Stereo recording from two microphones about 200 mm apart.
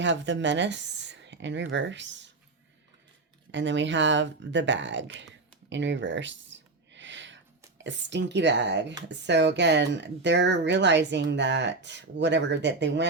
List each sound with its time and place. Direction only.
0.0 s speech: 65° right (ahead or behind)
3.5 s speech: 65° right (ahead or behind)